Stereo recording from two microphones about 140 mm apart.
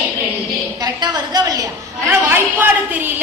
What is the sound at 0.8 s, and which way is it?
Speech, 30° right (ahead or behind).